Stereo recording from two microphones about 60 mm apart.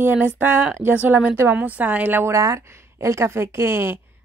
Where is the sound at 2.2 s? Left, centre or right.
Right.